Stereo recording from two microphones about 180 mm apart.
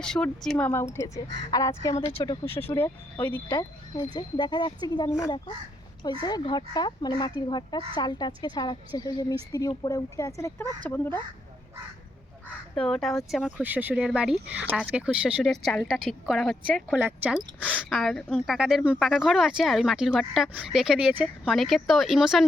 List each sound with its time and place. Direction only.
0.0 s a woman's voice: 5° left (ahead or behind)
3.5 s a woman's voice: 25° left (ahead or behind)
12.8 s speech: centre (ahead or behind)
17.0 s speech: 10° right (ahead or behind)
17.6 s speech: centre (ahead or behind)